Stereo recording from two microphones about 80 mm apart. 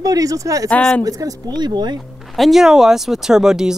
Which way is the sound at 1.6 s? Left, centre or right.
Right.